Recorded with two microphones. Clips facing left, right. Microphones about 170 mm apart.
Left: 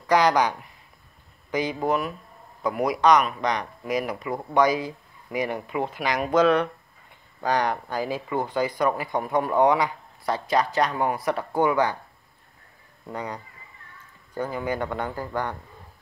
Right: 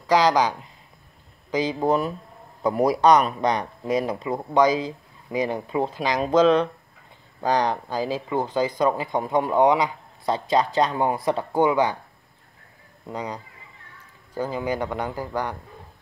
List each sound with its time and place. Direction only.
0.3 s speech: 15° right (ahead or behind)
13.1 s speech: 20° right (ahead or behind)